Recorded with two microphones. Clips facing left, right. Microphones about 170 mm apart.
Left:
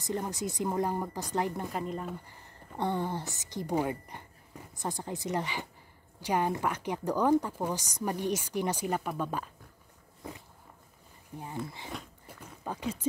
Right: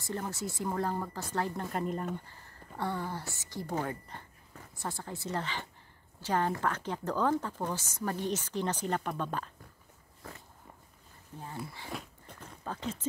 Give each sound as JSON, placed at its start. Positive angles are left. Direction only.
{"t": 0.0, "sound": "speech", "side_deg": 15}
{"t": 1.7, "sound": "speech", "side_deg": 0}
{"t": 2.2, "sound": "a woman's voice", "side_deg": 20}
{"t": 11.3, "sound": "speech", "side_deg": 15}
{"t": 11.9, "sound": "a sound", "side_deg": 0}
{"t": 12.4, "sound": "a sound", "side_deg": 10}